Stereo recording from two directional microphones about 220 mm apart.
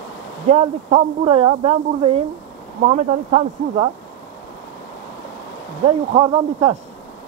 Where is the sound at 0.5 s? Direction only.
30° right (ahead or behind).